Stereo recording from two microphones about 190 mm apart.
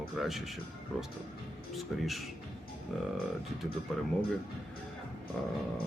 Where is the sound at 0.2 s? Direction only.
Centre (ahead or behind).